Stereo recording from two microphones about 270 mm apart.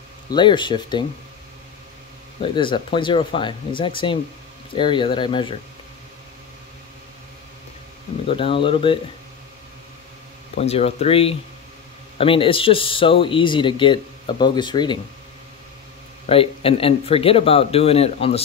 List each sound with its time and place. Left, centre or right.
0.3 s speech: centre
2.4 s speech: centre
8.3 s speech: centre
10.6 s speech: left
16.3 s speech: left